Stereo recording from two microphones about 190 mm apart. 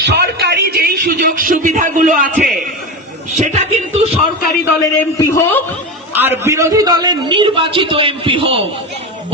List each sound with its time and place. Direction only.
0.0 s a man's voice: 60° right (ahead or behind); by 3.8 s 40° right (ahead or behind)
4.8 s a man's voice: 15° left (ahead or behind)
6.1 s a man's voice: 10° right (ahead or behind); by 8.6 s 25° right (ahead or behind)